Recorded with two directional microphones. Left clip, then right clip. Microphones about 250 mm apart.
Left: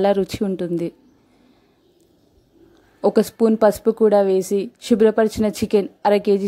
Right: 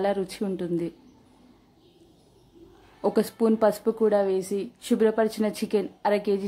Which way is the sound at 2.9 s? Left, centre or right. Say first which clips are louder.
Left 7 dB; left.